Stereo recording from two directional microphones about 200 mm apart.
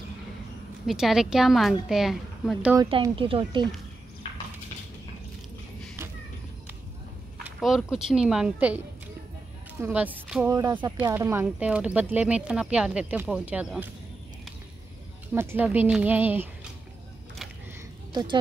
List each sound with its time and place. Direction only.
0.8 s speech: centre (ahead or behind)
2.8 s speech: 25° right (ahead or behind)
7.4 s speech: 5° right (ahead or behind)
15.3 s speech: 10° right (ahead or behind)
18.1 s a woman's voice: 25° right (ahead or behind)